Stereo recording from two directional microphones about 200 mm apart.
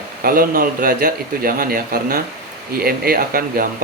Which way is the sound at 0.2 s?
45° right (ahead or behind).